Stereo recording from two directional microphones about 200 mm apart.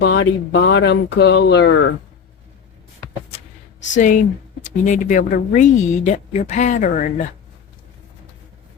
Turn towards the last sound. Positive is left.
turn(degrees=40)  # may be behind; listen again after turning